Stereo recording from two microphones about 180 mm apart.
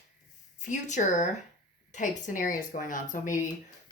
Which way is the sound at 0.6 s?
40° left (ahead or behind).